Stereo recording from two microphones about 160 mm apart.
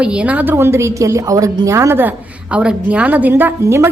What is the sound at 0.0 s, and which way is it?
A woman's voice, 5° right (ahead or behind).